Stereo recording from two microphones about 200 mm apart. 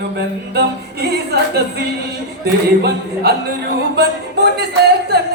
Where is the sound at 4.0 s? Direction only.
55° right (ahead or behind).